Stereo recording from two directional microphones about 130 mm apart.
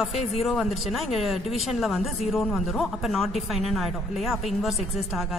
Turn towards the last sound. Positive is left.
turn(degrees=0)  # may be behind; listen again after turning